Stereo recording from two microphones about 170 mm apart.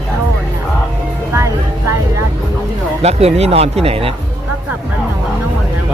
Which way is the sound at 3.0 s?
40° right (ahead or behind).